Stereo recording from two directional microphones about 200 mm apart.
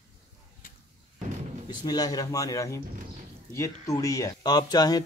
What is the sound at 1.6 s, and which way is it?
Speech, 20° left (ahead or behind).